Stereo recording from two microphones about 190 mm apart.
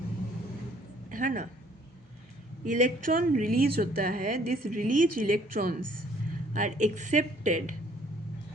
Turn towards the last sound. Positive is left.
turn(degrees=-40)  # may be behind; listen again after turning